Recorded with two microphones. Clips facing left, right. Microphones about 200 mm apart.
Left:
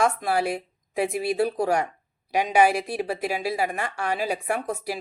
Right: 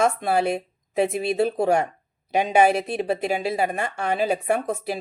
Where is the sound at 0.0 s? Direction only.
25° right (ahead or behind).